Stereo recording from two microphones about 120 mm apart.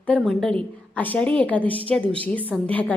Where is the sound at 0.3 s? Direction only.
5° left (ahead or behind).